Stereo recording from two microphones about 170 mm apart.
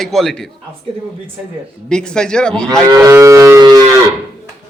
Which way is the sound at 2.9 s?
20° right (ahead or behind).